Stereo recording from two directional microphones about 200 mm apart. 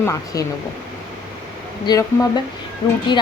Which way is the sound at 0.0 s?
15° left (ahead or behind).